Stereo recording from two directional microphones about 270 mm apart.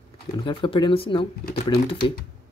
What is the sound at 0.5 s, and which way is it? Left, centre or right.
Speech, centre.